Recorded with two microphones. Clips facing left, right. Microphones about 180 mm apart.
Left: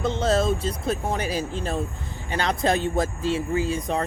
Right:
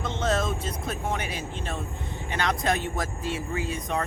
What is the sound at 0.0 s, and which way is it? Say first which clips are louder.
Speech: left 5 dB; 35° left (ahead or behind).